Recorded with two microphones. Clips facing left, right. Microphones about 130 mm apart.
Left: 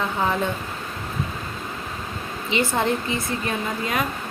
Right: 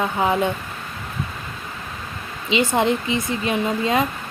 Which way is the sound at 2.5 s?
20° right (ahead or behind).